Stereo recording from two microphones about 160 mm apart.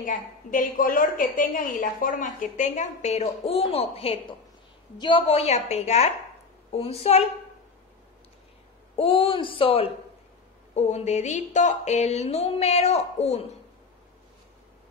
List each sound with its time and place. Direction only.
0.0 s a woman's voice: 55° left (ahead or behind); by 7.2 s 40° left (ahead or behind)
8.9 s a woman's voice: 35° left (ahead or behind)